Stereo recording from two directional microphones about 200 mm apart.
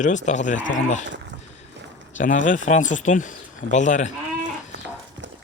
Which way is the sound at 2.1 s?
40° left (ahead or behind).